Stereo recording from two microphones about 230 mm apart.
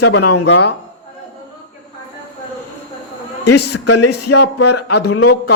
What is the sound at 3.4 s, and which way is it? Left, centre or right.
Speech, left.